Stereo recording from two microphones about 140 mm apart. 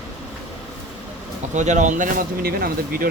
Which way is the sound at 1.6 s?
60° right (ahead or behind).